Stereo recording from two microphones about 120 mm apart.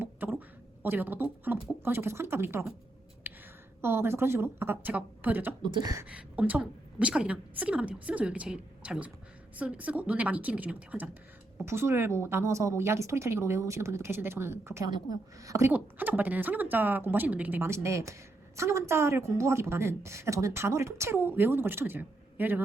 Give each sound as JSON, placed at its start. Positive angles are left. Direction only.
{"t": 0.0, "sound": "speech", "side_deg": -15}
{"t": 3.3, "sound": "a sound", "side_deg": -15}
{"t": 3.8, "sound": "speech", "side_deg": -20}
{"t": 5.7, "sound": "a sound", "side_deg": -30}
{"t": 6.1, "sound": "a woman's voice", "side_deg": -10}
{"t": 11.6, "sound": "speech", "side_deg": -20}
{"t": 15.7, "sound": "speech", "side_deg": -15}